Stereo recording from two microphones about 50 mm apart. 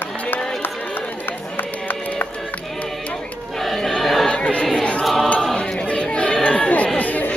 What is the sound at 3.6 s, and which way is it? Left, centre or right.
Choir, centre.